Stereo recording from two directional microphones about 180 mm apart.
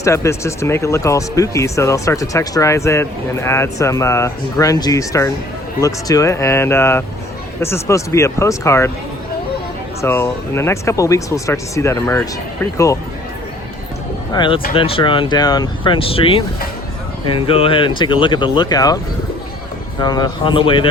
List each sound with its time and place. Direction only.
0.0 s speech: 15° left (ahead or behind)
10.0 s speech: 15° left (ahead or behind)
14.3 s speech: 25° left (ahead or behind)
20.0 s speech: 20° left (ahead or behind)